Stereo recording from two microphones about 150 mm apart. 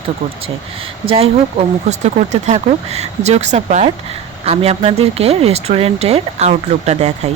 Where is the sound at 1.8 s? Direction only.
50° right (ahead or behind).